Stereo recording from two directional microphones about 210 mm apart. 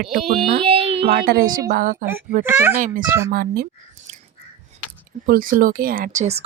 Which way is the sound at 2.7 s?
40° right (ahead or behind).